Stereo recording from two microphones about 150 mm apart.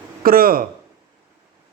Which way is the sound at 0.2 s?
75° right (ahead or behind).